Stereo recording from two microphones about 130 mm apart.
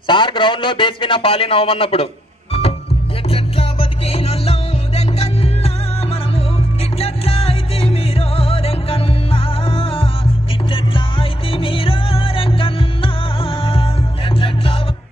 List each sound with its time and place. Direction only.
0.0 s a man's voice: 40° left (ahead or behind)
3.3 s music: 45° left (ahead or behind)
7.0 s music: 50° left (ahead or behind)